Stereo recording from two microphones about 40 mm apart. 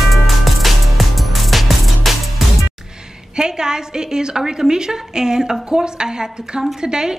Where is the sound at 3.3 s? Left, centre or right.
Centre.